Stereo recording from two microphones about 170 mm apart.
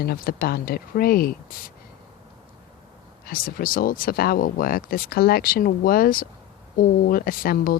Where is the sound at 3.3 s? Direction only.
60° left (ahead or behind).